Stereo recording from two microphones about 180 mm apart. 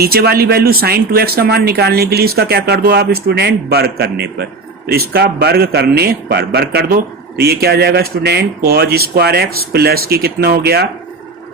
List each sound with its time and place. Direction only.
0.0 s a man's voice: 60° right (ahead or behind)